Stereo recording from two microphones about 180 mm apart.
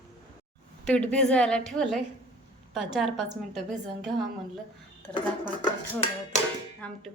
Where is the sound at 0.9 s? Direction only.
5° left (ahead or behind).